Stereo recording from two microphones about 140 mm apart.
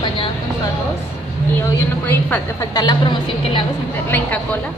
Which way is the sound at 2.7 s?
30° left (ahead or behind).